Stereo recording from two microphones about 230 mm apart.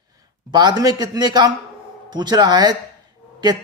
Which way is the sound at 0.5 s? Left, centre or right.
Centre.